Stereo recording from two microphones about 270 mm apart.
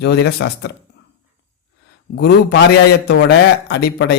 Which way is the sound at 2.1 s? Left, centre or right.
Left.